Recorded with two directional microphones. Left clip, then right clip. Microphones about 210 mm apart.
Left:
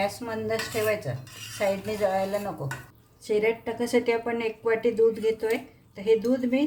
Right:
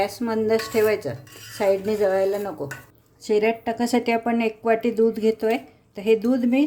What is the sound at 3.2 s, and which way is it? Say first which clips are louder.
Speech: right 4 dB; 40° right (ahead or behind).